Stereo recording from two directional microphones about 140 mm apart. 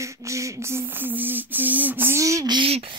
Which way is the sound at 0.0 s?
20° right (ahead or behind).